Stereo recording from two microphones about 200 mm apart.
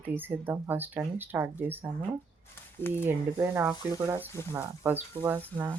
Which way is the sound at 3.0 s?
10° right (ahead or behind).